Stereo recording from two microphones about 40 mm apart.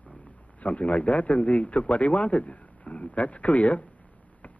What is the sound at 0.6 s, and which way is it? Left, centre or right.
Speech, left.